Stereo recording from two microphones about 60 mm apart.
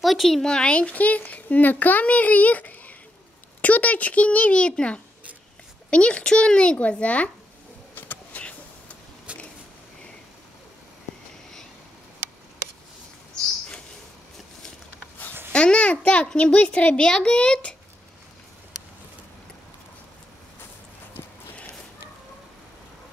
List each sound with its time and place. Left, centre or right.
0.0 s speech: centre
0.5 s a child's voice: centre
7.9 s vehicle: left
9.3 s a sound: centre
15.5 s a child's voice: centre